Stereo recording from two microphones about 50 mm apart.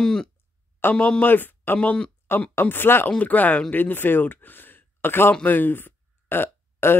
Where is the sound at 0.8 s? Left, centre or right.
Left.